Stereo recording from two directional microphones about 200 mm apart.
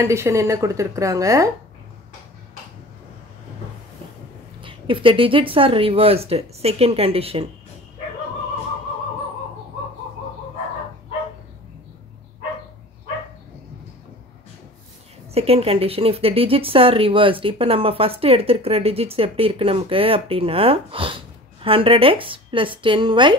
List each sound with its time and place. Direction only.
0.0 s a woman's voice: 15° right (ahead or behind)
4.6 s speech: 25° right (ahead or behind)
15.3 s speech: 30° right (ahead or behind)